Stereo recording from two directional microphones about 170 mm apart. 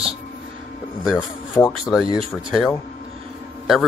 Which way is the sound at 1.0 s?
Centre (ahead or behind).